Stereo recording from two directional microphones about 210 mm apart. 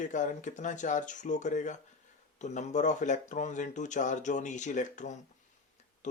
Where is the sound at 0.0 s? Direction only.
35° left (ahead or behind).